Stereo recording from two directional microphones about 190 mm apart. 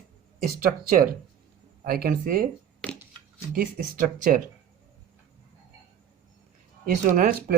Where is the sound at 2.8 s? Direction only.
5° left (ahead or behind).